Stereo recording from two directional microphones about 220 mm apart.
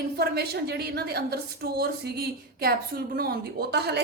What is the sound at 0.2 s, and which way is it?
A woman's voice, 45° right (ahead or behind).